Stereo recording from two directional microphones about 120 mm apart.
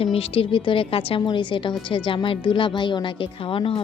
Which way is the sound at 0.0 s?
50° left (ahead or behind).